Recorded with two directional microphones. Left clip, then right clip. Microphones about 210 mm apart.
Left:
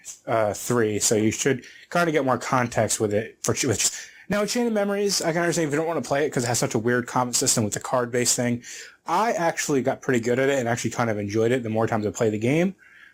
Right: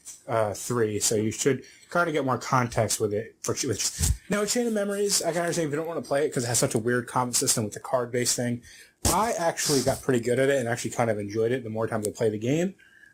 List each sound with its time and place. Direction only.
0.3 s speech: 30° left (ahead or behind)